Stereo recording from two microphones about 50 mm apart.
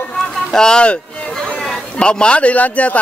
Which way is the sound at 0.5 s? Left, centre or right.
Centre.